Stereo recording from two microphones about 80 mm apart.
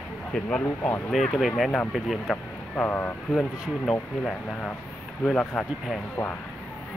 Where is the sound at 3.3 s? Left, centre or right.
Centre.